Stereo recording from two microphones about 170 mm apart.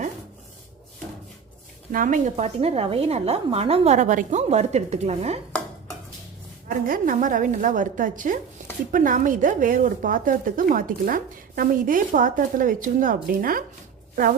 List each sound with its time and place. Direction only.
1.9 s a woman's voice: 55° right (ahead or behind)
2.3 s a woman's voice: 35° right (ahead or behind)
6.7 s a woman's voice: 55° right (ahead or behind)